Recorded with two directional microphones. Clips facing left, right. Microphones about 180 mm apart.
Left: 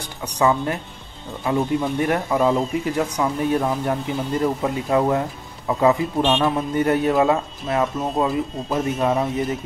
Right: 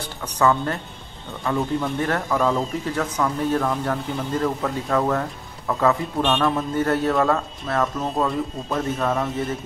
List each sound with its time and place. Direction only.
0.0 s speech: 10° left (ahead or behind)